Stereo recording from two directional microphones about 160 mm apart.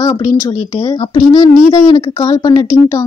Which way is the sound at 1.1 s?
25° left (ahead or behind).